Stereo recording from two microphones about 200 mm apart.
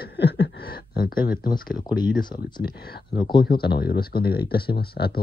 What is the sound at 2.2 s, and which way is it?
Speech, 20° left (ahead or behind).